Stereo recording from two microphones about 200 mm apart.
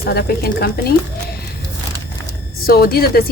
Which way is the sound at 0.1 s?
50° left (ahead or behind).